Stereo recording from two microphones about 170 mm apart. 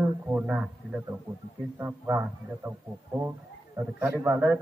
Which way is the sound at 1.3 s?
20° right (ahead or behind).